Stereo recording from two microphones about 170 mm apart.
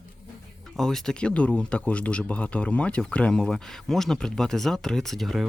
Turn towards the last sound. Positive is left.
turn(degrees=0)  # may be behind; listen again after turning